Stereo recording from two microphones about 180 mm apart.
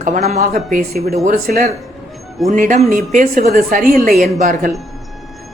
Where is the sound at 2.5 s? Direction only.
45° right (ahead or behind).